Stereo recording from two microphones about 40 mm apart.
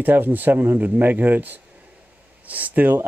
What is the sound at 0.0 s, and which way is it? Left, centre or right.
Speech, right.